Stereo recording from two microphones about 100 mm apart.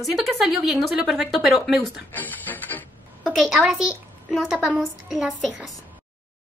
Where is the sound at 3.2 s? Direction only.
Centre (ahead or behind).